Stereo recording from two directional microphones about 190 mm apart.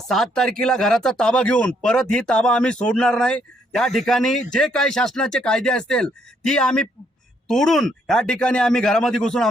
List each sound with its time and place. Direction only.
0.1 s speech: centre (ahead or behind)